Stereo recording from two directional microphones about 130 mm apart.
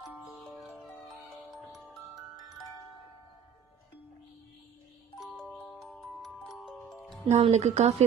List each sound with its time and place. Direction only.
0.3 s music: centre (ahead or behind)
5.2 s music: centre (ahead or behind)
7.3 s speech: 55° right (ahead or behind)